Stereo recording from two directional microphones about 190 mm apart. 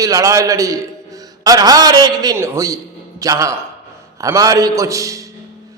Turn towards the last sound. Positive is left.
turn(degrees=-15)  # may be behind; listen again after turning